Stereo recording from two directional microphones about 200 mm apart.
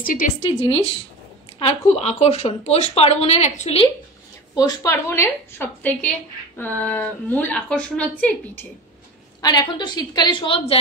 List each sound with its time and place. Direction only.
0.0 s a woman's voice: 45° left (ahead or behind)
0.4 s a woman's voice: 30° left (ahead or behind)
4.6 s a woman's voice: 15° left (ahead or behind)
9.4 s a woman's voice: 20° left (ahead or behind)